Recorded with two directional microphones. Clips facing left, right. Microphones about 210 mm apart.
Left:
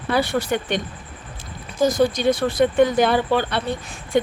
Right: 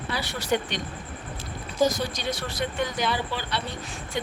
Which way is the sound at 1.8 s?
55° left (ahead or behind).